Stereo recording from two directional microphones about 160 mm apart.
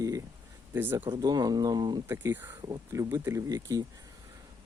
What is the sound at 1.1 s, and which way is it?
Speech, 25° right (ahead or behind).